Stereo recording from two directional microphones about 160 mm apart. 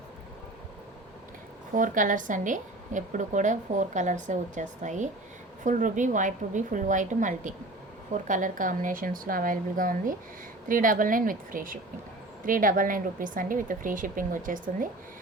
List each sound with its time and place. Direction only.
1.7 s a woman's voice: 55° right (ahead or behind)